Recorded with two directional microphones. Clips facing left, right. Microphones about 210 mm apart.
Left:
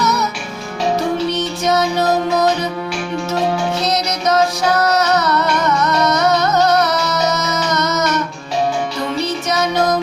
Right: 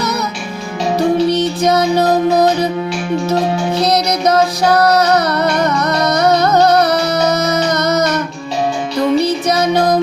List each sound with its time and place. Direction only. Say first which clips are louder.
0.0 s music: left 1 dB; 35° right (ahead or behind)
1.4 s music: right 4 dB; 35° right (ahead or behind)
3.8 s music: right 4 dB; 35° right (ahead or behind)
9.5 s music: right 2 dB; 35° right (ahead or behind)